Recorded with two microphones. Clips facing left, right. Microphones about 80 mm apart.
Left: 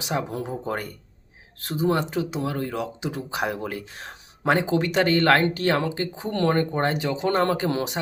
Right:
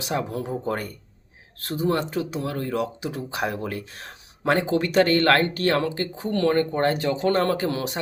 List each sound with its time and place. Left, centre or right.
0.0 s speech: centre